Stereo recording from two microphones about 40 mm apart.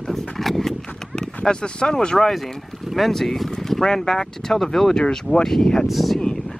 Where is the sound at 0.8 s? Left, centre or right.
Centre.